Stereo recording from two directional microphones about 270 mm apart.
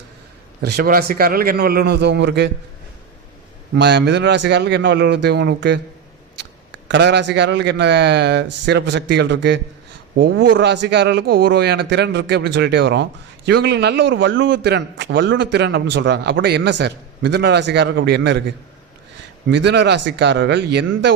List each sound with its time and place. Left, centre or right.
0.8 s a man's voice: right
3.8 s a man's voice: right
6.8 s a man's voice: right
19.5 s a man's voice: right